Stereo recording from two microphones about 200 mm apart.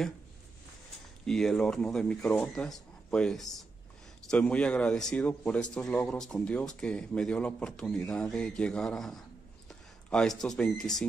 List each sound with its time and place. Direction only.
1.2 s a man's voice: 5° left (ahead or behind)